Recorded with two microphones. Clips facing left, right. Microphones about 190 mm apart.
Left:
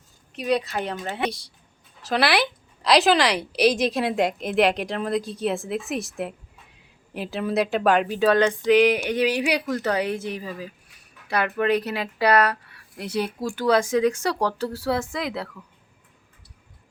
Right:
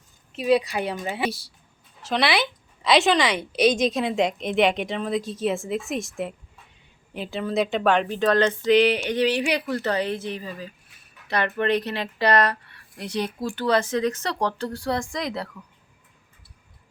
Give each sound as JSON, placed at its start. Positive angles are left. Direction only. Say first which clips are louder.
{"t": 0.3, "sound": "a woman's voice", "louder": "right 3 dB", "side_deg": -5}